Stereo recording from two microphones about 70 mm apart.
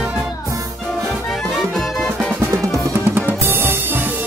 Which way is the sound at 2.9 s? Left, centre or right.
Right.